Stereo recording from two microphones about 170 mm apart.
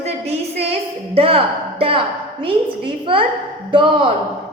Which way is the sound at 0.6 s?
35° right (ahead or behind).